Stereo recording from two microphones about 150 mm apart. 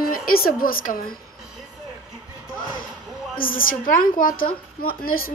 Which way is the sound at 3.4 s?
70° left (ahead or behind).